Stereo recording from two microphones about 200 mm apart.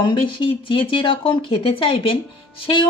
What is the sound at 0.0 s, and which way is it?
Speech, 25° left (ahead or behind).